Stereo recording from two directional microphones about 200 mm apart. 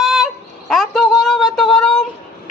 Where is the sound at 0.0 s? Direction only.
Centre (ahead or behind).